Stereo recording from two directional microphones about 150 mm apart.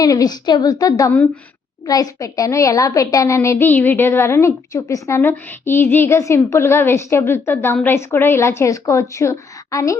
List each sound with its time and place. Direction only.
0.0 s a woman's voice: 25° left (ahead or behind)